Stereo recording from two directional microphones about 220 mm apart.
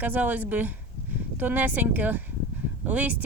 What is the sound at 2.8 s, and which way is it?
Speech, 5° right (ahead or behind).